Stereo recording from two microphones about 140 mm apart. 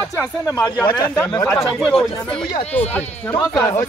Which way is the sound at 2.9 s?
10° left (ahead or behind).